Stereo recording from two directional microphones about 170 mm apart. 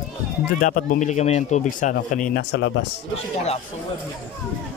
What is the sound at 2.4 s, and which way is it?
Speech, 85° left.